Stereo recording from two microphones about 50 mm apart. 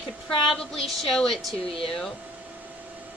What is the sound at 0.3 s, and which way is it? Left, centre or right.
Speech, centre.